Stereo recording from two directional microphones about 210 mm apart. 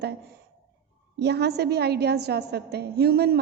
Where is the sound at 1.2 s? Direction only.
50° right (ahead or behind).